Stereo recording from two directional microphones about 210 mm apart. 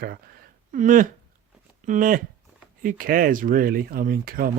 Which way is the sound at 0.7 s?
40° right (ahead or behind).